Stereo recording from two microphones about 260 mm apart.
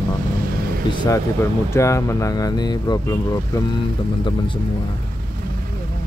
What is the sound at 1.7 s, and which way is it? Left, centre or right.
Speech, centre.